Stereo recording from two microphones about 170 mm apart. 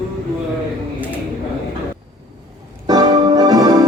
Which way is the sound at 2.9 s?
25° right (ahead or behind).